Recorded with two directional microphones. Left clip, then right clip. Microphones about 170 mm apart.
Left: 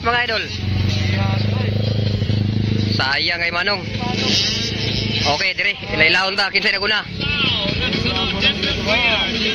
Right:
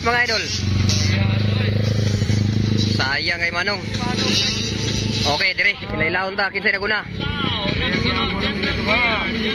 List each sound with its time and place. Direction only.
0.0 s speech: 5° right (ahead or behind)
3.0 s speech: centre (ahead or behind)
5.2 s speech: centre (ahead or behind)
8.0 s music: 15° left (ahead or behind)